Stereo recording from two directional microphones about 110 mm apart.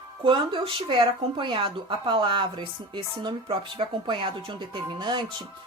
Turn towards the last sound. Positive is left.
turn(degrees=-45)  # may be behind; listen again after turning